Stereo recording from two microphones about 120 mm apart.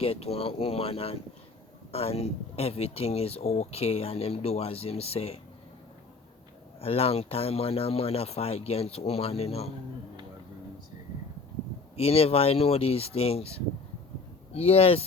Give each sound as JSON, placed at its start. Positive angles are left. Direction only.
{"t": 0.0, "sound": "speech", "side_deg": 55}
{"t": 6.7, "sound": "speech", "side_deg": 55}
{"t": 11.9, "sound": "speech", "side_deg": 55}